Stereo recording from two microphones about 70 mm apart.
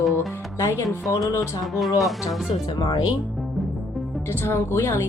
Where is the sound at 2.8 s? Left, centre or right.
Left.